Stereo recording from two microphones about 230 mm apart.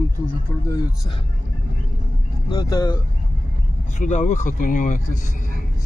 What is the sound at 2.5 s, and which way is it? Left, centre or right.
Speech, centre.